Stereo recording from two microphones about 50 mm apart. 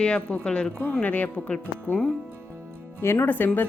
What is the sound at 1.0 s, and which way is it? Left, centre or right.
Speech, left.